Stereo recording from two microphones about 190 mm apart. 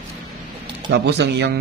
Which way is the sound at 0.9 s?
65° right (ahead or behind).